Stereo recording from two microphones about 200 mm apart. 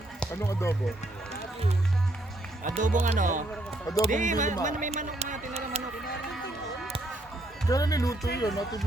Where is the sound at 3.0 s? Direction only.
40° right (ahead or behind).